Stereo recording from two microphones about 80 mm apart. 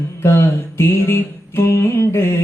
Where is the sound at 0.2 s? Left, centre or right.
Left.